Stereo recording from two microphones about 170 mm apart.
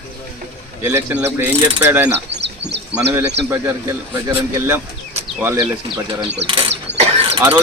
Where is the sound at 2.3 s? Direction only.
90° right.